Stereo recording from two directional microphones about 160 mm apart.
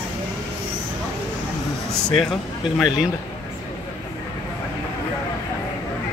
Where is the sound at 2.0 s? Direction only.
5° left (ahead or behind).